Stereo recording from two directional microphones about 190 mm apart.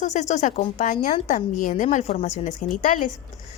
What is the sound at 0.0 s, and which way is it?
A woman's voice, 40° left (ahead or behind).